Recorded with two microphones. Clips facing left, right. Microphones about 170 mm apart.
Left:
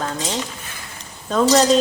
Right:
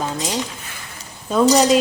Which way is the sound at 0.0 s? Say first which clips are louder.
Right 1 dB; 10° right (ahead or behind).